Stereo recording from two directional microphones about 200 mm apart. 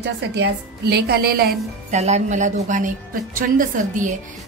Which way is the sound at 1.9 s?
35° right (ahead or behind).